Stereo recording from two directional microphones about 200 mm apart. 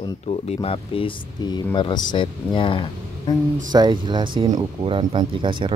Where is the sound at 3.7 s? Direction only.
20° right (ahead or behind).